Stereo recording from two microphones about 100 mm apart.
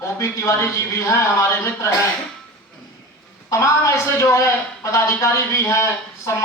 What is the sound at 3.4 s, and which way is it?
Speech, 30° left (ahead or behind).